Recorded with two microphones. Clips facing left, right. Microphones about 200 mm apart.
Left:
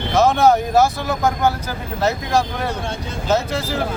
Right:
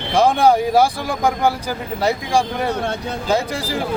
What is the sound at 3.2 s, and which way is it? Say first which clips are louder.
Speech: left 1 dB; 10° right (ahead or behind).